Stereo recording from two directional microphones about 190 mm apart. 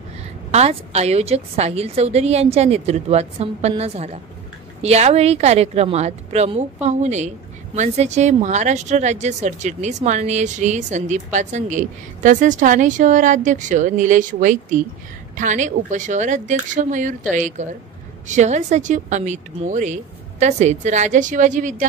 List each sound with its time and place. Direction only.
0.5 s a woman's voice: 35° right (ahead or behind)